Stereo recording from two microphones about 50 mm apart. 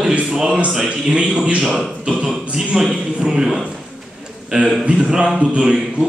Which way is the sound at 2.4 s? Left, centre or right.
Centre.